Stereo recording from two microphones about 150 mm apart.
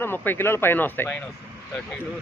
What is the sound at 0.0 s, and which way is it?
Speech, 15° left (ahead or behind).